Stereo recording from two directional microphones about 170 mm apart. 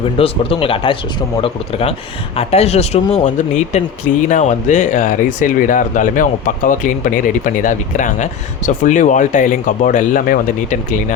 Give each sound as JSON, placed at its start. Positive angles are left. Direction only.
{"t": 0.2, "sound": "speech", "side_deg": 30}